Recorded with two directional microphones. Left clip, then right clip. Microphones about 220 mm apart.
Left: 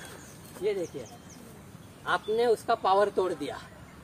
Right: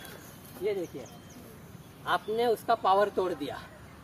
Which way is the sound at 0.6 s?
25° left (ahead or behind).